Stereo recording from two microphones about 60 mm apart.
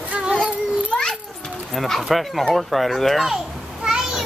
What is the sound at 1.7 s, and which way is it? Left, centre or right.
A child's voice, centre.